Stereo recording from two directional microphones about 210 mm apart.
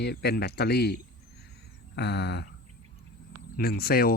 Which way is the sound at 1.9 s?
55° left (ahead or behind).